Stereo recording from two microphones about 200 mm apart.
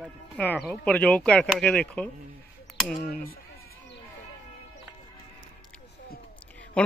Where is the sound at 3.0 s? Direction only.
50° left (ahead or behind).